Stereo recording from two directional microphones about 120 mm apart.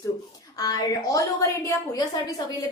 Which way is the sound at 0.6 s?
30° left (ahead or behind).